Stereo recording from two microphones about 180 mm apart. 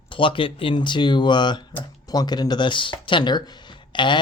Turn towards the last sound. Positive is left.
turn(degrees=25)  # may be behind; listen again after turning